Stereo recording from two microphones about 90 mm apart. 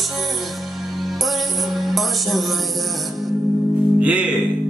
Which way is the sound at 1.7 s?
Centre (ahead or behind).